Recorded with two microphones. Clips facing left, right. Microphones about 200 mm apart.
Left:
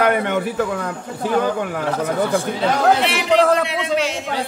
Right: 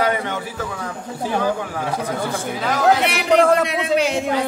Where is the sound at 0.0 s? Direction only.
65° left (ahead or behind).